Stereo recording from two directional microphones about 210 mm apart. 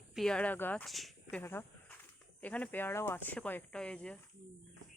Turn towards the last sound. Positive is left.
turn(degrees=5)  # may be behind; listen again after turning